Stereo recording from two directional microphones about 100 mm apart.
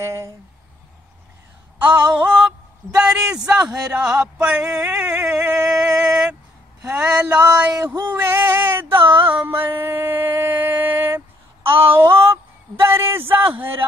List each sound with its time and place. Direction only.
0.0 s a man's voice: 30° right (ahead or behind)
1.8 s speech: 15° right (ahead or behind)
8.1 s a sound: 20° right (ahead or behind)
13.6 s a man's voice: 20° right (ahead or behind)